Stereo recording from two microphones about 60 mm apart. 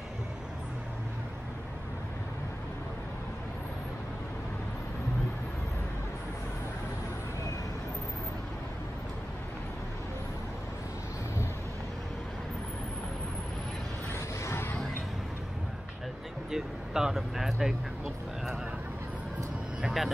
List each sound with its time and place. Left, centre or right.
14.1 s vehicle: left
16.4 s speech: centre
19.8 s vehicle: centre